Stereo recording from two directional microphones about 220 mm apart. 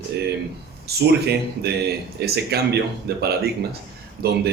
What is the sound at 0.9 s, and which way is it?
A man's voice, 45° right (ahead or behind).